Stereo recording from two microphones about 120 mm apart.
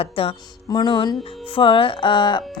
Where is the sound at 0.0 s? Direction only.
55° left (ahead or behind).